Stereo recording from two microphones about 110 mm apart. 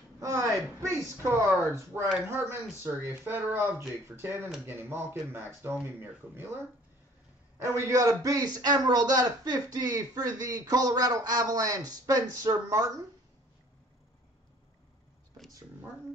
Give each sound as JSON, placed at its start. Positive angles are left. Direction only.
{"t": 0.2, "sound": "speech", "side_deg": -30}